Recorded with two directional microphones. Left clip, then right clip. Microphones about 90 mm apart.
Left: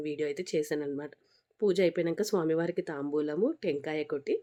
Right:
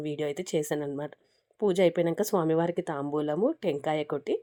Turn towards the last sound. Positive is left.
turn(degrees=-50)  # may be behind; listen again after turning